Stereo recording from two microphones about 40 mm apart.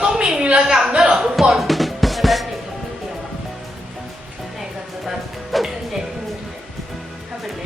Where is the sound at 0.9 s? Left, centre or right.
Right.